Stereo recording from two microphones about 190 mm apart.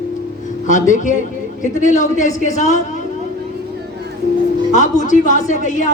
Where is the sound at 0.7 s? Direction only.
40° left (ahead or behind).